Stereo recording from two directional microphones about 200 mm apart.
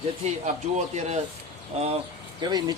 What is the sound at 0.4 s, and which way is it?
Speech, 35° right (ahead or behind).